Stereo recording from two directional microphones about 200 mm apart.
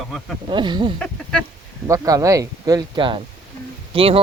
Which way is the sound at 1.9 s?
15° right (ahead or behind).